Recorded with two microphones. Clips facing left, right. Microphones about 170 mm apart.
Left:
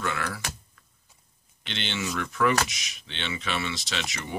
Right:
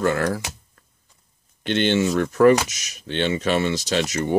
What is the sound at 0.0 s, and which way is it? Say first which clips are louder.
Speech: right 10 dB; 45° right (ahead or behind).